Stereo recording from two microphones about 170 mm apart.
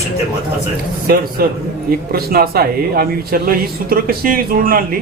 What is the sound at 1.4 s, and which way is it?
A man's voice, 60° right (ahead or behind).